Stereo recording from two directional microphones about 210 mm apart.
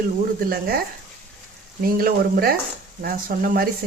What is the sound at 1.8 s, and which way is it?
Speech, 45° right (ahead or behind).